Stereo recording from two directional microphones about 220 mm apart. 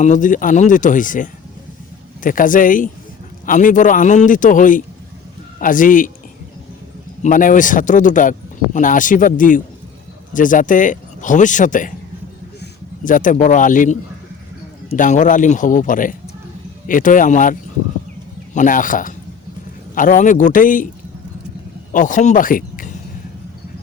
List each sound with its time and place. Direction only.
0.0 s speech: 35° left (ahead or behind)
7.2 s speech: 35° left (ahead or behind)
13.1 s speech: 35° left (ahead or behind)
21.9 s speech: 35° left (ahead or behind)